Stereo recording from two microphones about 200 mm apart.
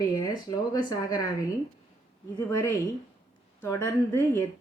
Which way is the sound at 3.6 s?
15° left (ahead or behind).